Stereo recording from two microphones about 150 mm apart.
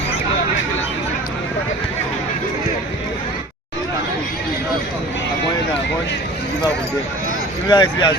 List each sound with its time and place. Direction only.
7.7 s speech: 25° left (ahead or behind)